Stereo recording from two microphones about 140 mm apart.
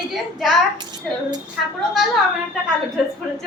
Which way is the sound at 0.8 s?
30° right (ahead or behind).